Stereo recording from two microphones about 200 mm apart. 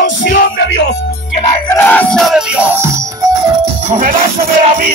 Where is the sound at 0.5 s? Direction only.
65° left (ahead or behind).